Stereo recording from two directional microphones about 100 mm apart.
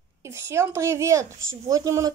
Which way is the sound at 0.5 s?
25° right (ahead or behind).